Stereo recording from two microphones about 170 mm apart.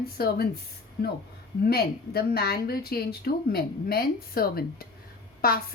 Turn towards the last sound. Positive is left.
turn(degrees=60)  # may be behind; listen again after turning